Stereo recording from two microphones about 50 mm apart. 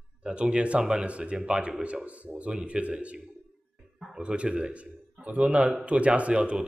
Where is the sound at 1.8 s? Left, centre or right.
Right.